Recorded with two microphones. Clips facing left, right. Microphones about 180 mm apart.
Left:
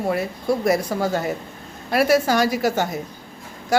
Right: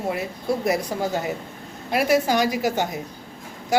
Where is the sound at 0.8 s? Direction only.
15° right (ahead or behind).